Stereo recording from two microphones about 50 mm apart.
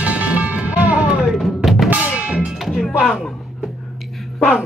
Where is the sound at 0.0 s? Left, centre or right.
Right.